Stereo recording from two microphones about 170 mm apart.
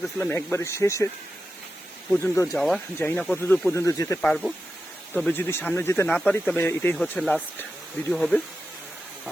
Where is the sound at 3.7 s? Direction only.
20° left (ahead or behind).